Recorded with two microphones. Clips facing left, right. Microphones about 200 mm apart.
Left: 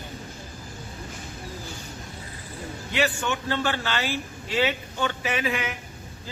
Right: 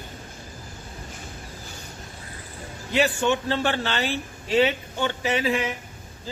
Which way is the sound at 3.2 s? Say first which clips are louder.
Right 4 dB; 30° right (ahead or behind).